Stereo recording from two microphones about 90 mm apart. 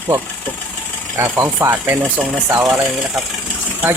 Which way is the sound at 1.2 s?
30° right (ahead or behind).